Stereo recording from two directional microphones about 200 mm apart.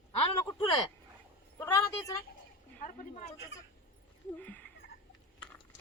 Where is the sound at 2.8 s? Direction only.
40° left (ahead or behind).